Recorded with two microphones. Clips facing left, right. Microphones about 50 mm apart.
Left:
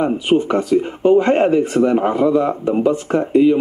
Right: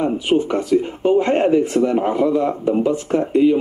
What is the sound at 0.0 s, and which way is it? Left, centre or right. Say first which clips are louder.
Speech: left 2 dB; centre.